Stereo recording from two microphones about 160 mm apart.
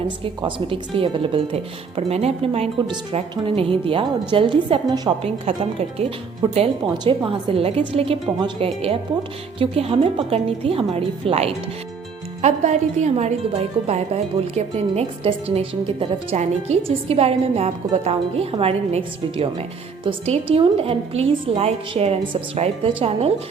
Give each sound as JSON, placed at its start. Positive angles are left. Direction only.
{"t": 0.4, "sound": "a woman's voice", "side_deg": -30}